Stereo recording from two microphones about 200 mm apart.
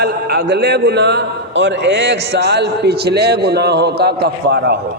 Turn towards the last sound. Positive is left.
turn(degrees=-55)  # may be behind; listen again after turning